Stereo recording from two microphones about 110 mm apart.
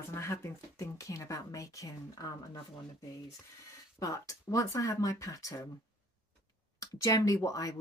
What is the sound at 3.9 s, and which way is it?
Speech, 30° left (ahead or behind).